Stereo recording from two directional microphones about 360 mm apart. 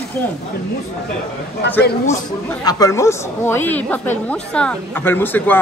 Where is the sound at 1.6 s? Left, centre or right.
Left.